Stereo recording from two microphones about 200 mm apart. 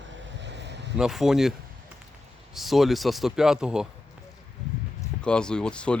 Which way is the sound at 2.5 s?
Centre (ahead or behind).